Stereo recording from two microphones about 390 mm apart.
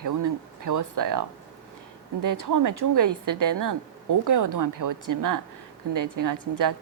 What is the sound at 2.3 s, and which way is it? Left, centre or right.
Speech, right.